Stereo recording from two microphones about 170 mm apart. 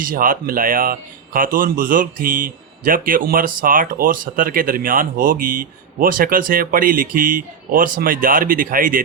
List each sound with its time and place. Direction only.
0.0 s speech: 55° right (ahead or behind)